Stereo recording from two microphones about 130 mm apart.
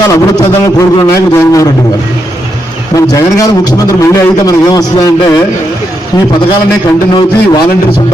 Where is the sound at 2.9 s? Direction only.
25° left (ahead or behind).